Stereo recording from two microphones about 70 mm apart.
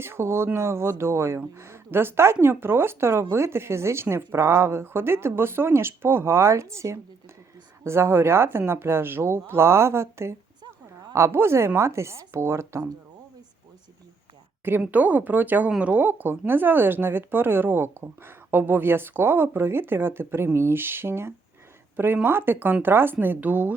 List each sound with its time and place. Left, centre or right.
0.0 s speech: right
14.8 s speech: right